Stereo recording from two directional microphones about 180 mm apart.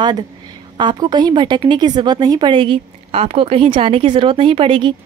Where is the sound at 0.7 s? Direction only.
25° right (ahead or behind).